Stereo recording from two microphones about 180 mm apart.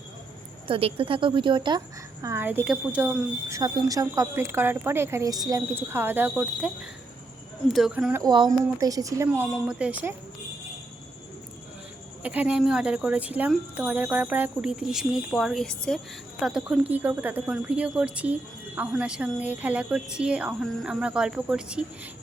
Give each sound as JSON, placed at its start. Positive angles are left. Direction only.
{"t": 0.7, "sound": "a woman's voice", "side_deg": -30}
{"t": 2.2, "sound": "speech", "side_deg": -15}
{"t": 3.5, "sound": "speech", "side_deg": -20}
{"t": 7.7, "sound": "speech", "side_deg": 0}
{"t": 8.2, "sound": "a woman's voice", "side_deg": -25}
{"t": 12.2, "sound": "speech", "side_deg": -10}